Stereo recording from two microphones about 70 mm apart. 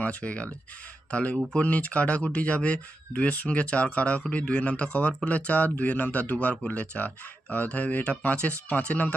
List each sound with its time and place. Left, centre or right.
0.0 s speech: centre